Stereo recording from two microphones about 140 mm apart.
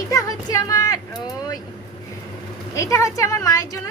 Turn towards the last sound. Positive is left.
turn(degrees=25)  # may be behind; listen again after turning